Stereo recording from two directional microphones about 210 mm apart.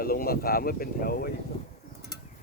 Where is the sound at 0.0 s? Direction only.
45° left (ahead or behind).